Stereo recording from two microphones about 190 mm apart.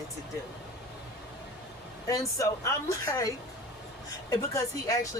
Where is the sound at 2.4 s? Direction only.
15° left (ahead or behind).